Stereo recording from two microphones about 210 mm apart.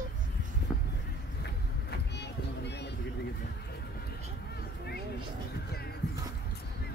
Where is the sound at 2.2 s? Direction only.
55° left (ahead or behind).